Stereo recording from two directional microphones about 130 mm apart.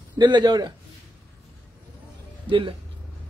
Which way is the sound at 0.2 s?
35° right (ahead or behind).